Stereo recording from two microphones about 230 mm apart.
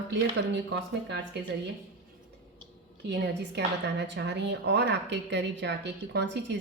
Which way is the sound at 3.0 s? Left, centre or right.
Right.